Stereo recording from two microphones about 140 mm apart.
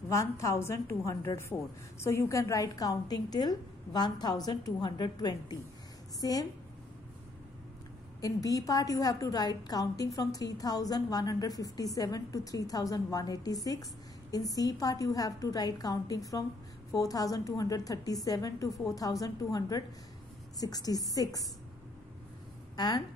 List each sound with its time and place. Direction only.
0.1 s a woman's voice: 20° left (ahead or behind)
8.2 s a woman's voice: 25° left (ahead or behind)
22.8 s a woman's voice: 30° left (ahead or behind)